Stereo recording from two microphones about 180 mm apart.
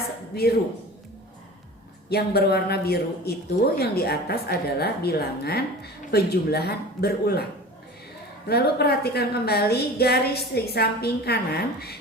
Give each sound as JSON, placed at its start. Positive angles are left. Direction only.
{"t": 2.0, "sound": "a woman's voice", "side_deg": 60}
{"t": 8.4, "sound": "a woman's voice", "side_deg": 60}